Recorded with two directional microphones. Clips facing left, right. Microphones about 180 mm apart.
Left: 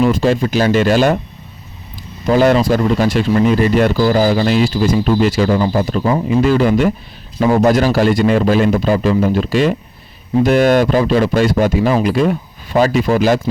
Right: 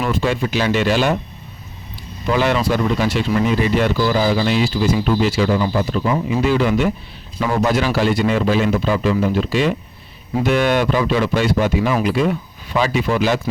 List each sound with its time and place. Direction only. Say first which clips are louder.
0.2 s a man's voice: left 5 dB; 40° left (ahead or behind)
2.2 s a man's voice: left 6 dB; 45° left (ahead or behind)